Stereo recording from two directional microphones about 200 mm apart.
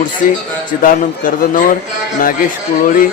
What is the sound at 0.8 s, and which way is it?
Speech, 40° left (ahead or behind).